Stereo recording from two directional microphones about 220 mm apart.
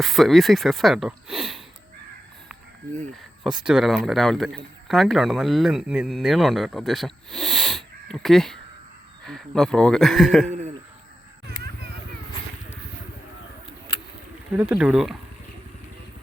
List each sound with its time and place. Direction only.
0.0 s speech: centre (ahead or behind)
3.6 s speech: 5° right (ahead or behind)
10.5 s a sound: 30° right (ahead or behind)
14.5 s speech: 5° right (ahead or behind)